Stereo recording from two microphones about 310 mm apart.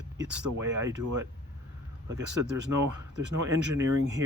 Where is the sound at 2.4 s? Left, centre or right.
Right.